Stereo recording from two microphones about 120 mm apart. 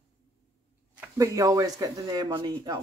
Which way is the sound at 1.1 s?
30° right (ahead or behind).